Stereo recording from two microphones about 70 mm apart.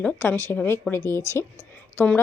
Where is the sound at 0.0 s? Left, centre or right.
Left.